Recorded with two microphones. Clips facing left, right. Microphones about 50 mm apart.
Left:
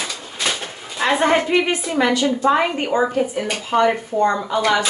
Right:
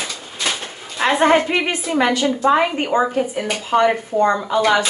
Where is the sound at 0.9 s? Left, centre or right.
Right.